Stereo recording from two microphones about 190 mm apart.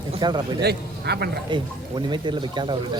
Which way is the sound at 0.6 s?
60° right (ahead or behind).